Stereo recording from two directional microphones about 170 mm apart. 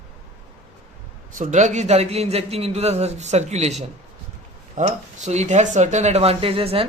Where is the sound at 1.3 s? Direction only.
45° right (ahead or behind).